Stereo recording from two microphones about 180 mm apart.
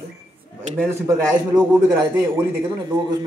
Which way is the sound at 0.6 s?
15° right (ahead or behind).